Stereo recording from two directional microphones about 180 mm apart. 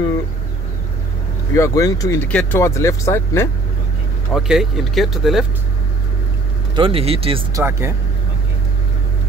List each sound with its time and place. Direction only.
1.5 s speech: 20° left (ahead or behind)
2.2 s speech: 10° left (ahead or behind)
4.3 s speech: 5° right (ahead or behind)
6.7 s speech: 30° right (ahead or behind)
7.5 s speech: 15° right (ahead or behind)